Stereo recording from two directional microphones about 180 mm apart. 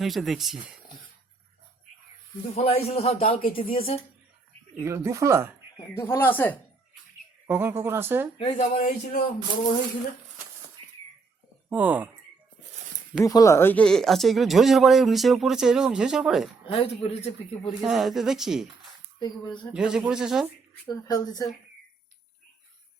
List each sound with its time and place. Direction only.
0.0 s speech: centre (ahead or behind)
2.6 s a man's voice: 35° left (ahead or behind)
4.8 s speech: 15° right (ahead or behind)
6.0 s speech: 10° left (ahead or behind)
7.4 s speech: 10° right (ahead or behind)
8.4 s a man's voice: 35° left (ahead or behind)
11.7 s speech: 10° right (ahead or behind)
13.2 s speech: 20° left (ahead or behind); by 16.5 s centre (ahead or behind)
16.6 s a man's voice: 35° left (ahead or behind)
17.8 s speech: centre (ahead or behind)
19.7 s speech: 5° right (ahead or behind)
20.8 s speech: 20° left (ahead or behind)